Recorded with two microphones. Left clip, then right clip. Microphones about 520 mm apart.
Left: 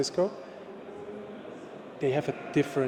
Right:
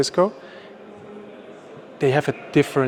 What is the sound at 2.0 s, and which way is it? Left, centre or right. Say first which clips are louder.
Speech: right 9 dB; right.